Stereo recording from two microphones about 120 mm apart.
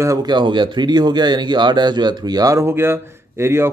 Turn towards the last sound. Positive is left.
turn(degrees=-20)  # may be behind; listen again after turning